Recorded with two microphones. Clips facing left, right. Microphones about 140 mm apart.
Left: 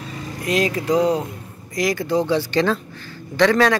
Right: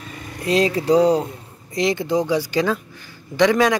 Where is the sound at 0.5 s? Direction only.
30° right (ahead or behind).